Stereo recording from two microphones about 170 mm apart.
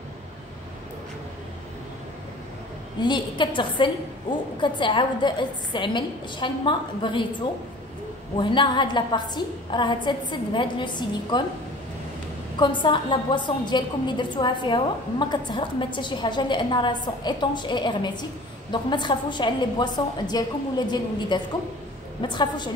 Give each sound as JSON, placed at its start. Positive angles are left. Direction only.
{"t": 3.0, "sound": "a woman's voice", "side_deg": 25}
{"t": 8.4, "sound": "a woman's voice", "side_deg": 30}
{"t": 12.5, "sound": "a woman's voice", "side_deg": 25}